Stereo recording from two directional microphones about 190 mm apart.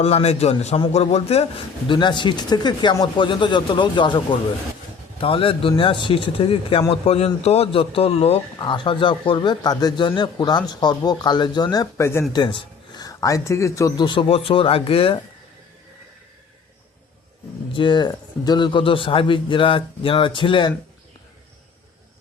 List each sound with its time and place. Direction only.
0.0 s a man's voice: 35° left (ahead or behind)
17.7 s speech: 25° left (ahead or behind)